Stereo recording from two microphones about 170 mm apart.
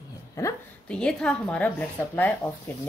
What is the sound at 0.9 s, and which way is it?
A woman's voice, 5° left (ahead or behind).